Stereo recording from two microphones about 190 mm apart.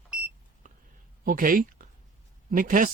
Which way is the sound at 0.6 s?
45° right (ahead or behind).